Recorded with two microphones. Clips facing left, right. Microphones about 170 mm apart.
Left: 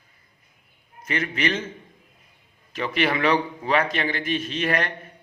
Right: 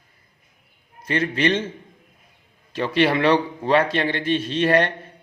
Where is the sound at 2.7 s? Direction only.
30° right (ahead or behind).